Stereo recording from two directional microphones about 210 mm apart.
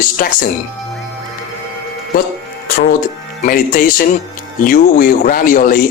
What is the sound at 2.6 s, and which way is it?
Speech, 40° left (ahead or behind).